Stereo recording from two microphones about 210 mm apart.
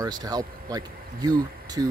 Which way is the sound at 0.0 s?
20° right (ahead or behind).